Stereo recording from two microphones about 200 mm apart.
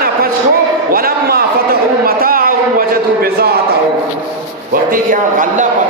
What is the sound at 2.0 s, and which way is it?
A man's voice, 45° right (ahead or behind).